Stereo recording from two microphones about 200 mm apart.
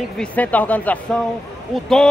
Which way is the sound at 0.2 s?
5° left (ahead or behind).